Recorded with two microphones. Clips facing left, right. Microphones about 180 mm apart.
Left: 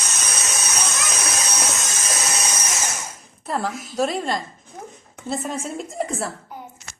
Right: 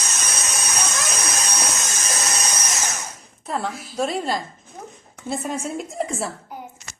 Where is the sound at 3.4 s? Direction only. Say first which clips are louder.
Left 1 dB; centre (ahead or behind).